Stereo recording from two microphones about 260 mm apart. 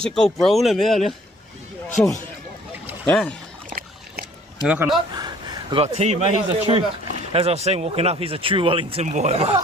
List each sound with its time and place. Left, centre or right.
0.0 s speech: centre
2.8 s boat: centre
4.6 s speech: centre
5.1 s a man's voice: centre